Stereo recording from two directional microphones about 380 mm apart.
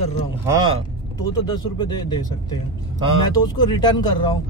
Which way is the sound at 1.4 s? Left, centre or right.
Centre.